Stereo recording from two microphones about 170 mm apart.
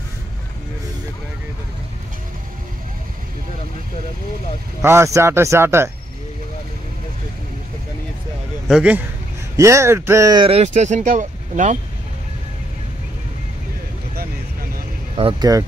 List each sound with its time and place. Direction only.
4.8 s speech: 15° right (ahead or behind)
8.6 s a man's voice: 5° right (ahead or behind)
9.6 s speech: 15° right (ahead or behind)
10.4 s speech: 40° right (ahead or behind)
15.1 s speech: 35° right (ahead or behind)